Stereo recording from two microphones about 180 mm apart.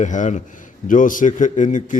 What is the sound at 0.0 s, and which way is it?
A man's voice, 45° left (ahead or behind).